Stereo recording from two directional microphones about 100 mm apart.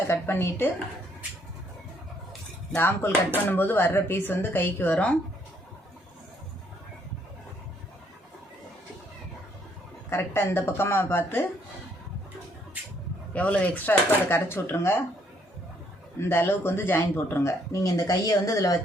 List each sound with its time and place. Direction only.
0.1 s speech: 25° left (ahead or behind)
2.7 s speech: 25° left (ahead or behind)
10.1 s speech: 20° left (ahead or behind)
13.3 s speech: 15° left (ahead or behind)
16.2 s speech: 25° left (ahead or behind)